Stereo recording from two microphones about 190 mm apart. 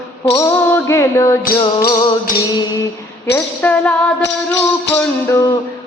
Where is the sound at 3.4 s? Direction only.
10° left (ahead or behind).